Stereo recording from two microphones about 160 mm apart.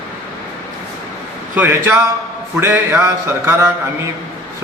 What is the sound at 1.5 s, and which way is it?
A man's voice, 10° right (ahead or behind).